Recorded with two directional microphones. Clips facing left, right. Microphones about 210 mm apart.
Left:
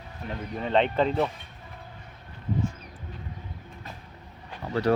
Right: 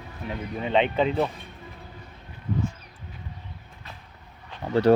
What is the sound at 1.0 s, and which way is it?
Speech, centre (ahead or behind).